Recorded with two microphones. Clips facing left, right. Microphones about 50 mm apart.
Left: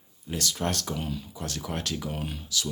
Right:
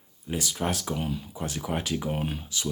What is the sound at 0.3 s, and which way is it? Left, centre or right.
Speech, centre.